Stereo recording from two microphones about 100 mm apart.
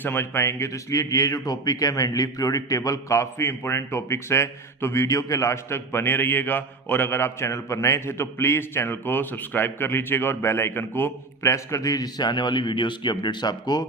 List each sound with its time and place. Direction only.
0.0 s speech: 20° left (ahead or behind); by 13.8 s 45° left (ahead or behind)